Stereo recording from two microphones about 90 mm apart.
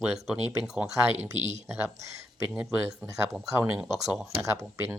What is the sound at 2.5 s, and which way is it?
Speech, 10° right (ahead or behind).